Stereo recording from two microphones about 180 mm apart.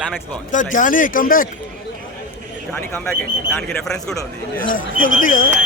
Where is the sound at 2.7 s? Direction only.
5° left (ahead or behind).